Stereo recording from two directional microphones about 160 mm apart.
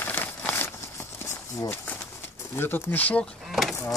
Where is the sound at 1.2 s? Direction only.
15° left (ahead or behind).